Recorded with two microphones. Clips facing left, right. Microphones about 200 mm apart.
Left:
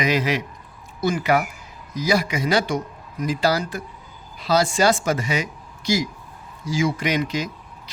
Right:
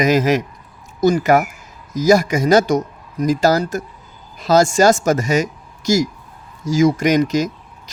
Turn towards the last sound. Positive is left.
turn(degrees=-45)  # may be behind; listen again after turning